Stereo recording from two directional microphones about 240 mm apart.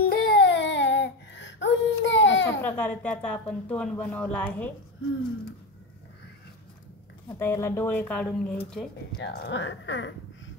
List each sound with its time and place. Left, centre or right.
0.0 s a sound: left
2.6 s speech: centre
7.2 s speech: centre
9.2 s speech: left